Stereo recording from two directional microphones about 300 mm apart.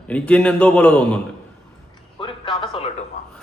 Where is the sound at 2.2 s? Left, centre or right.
Centre.